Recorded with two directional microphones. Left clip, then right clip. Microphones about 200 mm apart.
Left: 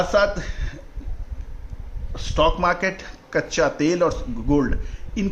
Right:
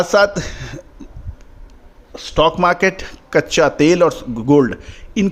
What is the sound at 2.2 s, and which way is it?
A man's voice, 45° right (ahead or behind).